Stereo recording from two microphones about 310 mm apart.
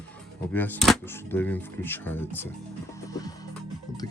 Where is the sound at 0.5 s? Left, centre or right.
Centre.